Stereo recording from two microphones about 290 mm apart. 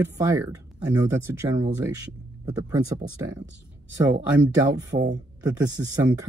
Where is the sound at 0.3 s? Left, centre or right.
Centre.